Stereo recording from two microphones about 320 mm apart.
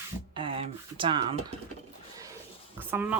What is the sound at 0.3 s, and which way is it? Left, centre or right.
Speech, centre.